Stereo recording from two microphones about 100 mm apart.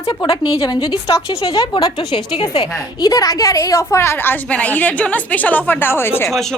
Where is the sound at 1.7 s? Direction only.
45° left (ahead or behind).